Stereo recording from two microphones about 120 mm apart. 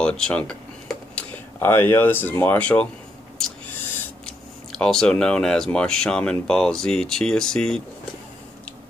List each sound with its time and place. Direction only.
0.0 s a sound: 5° left (ahead or behind)
1.6 s speech: 20° left (ahead or behind)
4.7 s speech: 5° left (ahead or behind)